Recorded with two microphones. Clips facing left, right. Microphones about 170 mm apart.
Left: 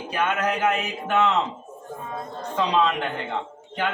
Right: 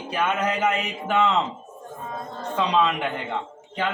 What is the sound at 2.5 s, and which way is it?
Speech, 10° right (ahead or behind).